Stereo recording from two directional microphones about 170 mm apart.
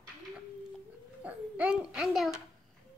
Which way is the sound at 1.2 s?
10° right (ahead or behind).